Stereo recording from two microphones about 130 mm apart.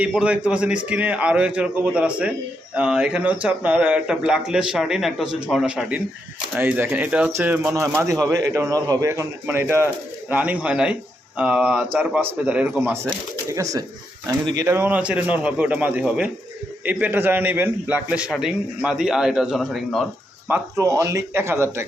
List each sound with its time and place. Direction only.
0.0 s a man's voice: 10° right (ahead or behind)
13.5 s a man's voice: 25° right (ahead or behind); by 20.1 s centre (ahead or behind)
20.5 s a man's voice: 25° right (ahead or behind)